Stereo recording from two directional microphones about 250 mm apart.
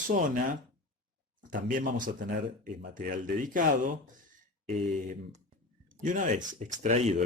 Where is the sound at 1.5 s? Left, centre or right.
Right.